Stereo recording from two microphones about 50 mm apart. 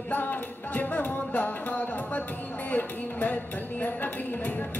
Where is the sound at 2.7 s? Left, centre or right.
Left.